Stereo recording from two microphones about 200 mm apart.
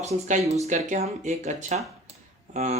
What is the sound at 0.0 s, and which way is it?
Speech, 35° right (ahead or behind).